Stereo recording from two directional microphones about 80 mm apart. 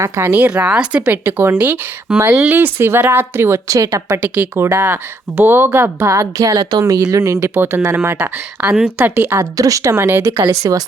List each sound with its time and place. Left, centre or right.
0.0 s a woman's voice: right
1.2 s speech: right
3.7 s speech: right
4.4 s speech: right
7.5 s speech: right
8.6 s a woman's voice: centre
9.0 s speech: right
9.4 s speech: right
9.9 s speech: right
10.4 s speech: right